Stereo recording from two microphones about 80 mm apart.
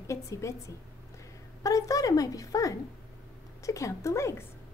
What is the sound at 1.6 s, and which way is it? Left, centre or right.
A woman's voice, left.